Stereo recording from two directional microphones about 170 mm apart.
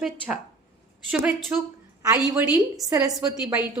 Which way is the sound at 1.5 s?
5° right (ahead or behind).